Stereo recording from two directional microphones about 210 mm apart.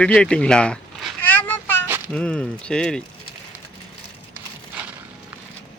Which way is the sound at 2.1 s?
5° left (ahead or behind).